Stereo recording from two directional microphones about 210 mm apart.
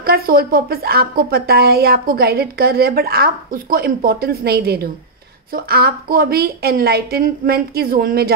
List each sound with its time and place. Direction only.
0.0 s speech: 45° right (ahead or behind)